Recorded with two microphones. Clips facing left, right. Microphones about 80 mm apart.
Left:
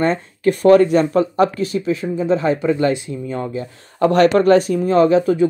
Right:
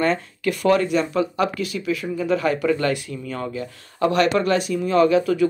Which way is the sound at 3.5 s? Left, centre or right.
Left.